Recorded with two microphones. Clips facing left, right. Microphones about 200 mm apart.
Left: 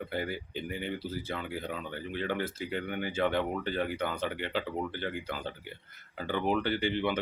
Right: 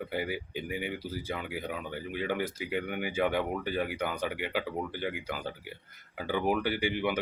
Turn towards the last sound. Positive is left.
turn(degrees=-10)  # may be behind; listen again after turning